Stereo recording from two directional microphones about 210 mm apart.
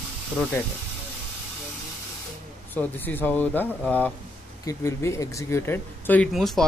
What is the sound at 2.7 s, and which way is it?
Speech, 10° left (ahead or behind).